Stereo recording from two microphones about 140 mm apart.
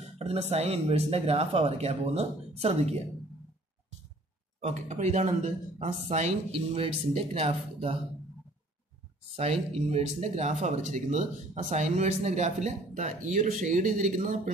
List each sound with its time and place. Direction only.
0.0 s speech: 45° right (ahead or behind)
4.6 s speech: 50° right (ahead or behind)
9.4 s speech: 45° right (ahead or behind); by 14.5 s 65° right (ahead or behind)